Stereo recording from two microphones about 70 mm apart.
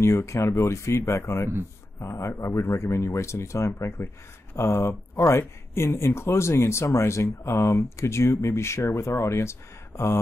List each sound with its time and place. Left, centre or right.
0.0 s speech: left